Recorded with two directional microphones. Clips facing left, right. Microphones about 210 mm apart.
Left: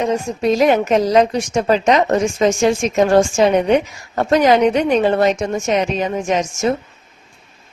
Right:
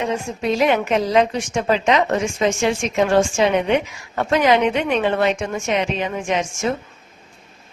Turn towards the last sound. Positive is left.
turn(degrees=40)  # may be behind; listen again after turning